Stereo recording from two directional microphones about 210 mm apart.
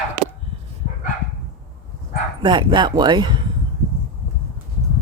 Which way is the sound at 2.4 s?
20° right (ahead or behind).